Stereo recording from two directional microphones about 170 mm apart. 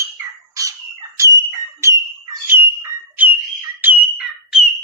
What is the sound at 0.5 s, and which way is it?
Bird, 20° right (ahead or behind).